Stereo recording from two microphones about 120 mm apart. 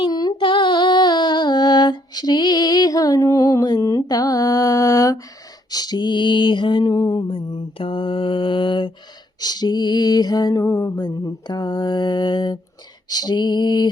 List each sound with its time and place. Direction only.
0.0 s female singing: 35° left (ahead or behind)
5.7 s mantra: 35° left (ahead or behind)
13.1 s a sound: 35° left (ahead or behind)